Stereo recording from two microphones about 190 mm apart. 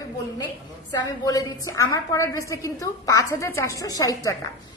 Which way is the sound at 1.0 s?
20° left (ahead or behind).